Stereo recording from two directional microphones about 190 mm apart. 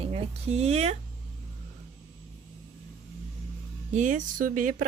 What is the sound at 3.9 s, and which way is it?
Speech, 40° right (ahead or behind).